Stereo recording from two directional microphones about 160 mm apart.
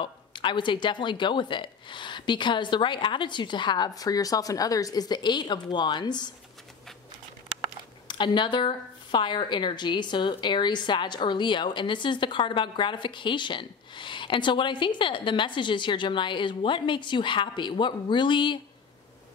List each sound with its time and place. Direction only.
0.0 s a woman's voice: 30° left (ahead or behind)
8.1 s a woman's voice: 30° left (ahead or behind)